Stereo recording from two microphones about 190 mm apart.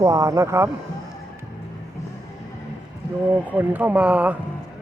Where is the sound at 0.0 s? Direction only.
15° right (ahead or behind).